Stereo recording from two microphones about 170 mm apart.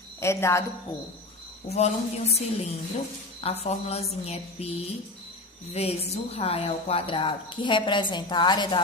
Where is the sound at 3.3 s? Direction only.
35° left (ahead or behind).